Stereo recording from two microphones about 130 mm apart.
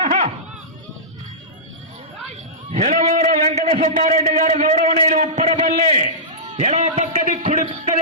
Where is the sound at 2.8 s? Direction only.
65° right (ahead or behind); by 5.8 s 80° right.